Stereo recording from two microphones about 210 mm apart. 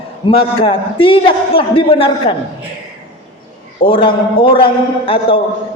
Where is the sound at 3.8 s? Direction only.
25° left (ahead or behind).